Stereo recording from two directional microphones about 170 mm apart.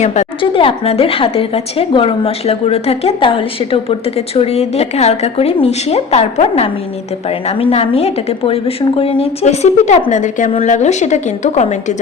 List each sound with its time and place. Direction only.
0.0 s a woman's voice: 45° left (ahead or behind)